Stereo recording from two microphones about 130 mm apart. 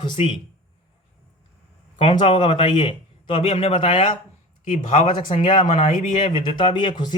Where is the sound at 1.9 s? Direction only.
40° left (ahead or behind).